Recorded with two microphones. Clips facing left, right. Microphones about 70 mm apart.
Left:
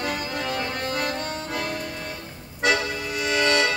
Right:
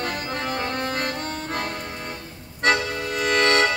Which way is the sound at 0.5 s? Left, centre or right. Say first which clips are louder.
Right 1 dB; right.